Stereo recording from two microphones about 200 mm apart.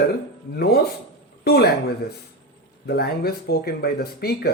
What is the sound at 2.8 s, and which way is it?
Speech, 50° left (ahead or behind).